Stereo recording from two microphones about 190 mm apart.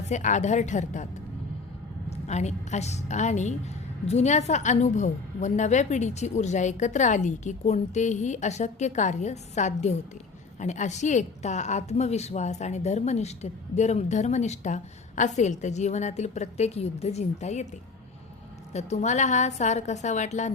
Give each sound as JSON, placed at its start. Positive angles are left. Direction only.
{"t": 0.1, "sound": "a woman's voice", "side_deg": 40}
{"t": 2.0, "sound": "a woman's voice", "side_deg": 35}
{"t": 18.7, "sound": "a woman's voice", "side_deg": 35}